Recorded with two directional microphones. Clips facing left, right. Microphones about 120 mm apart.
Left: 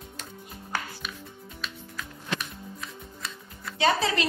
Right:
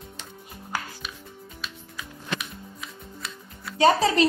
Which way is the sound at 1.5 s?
5° right (ahead or behind).